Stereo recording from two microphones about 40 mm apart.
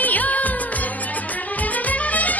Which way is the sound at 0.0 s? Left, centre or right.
Left.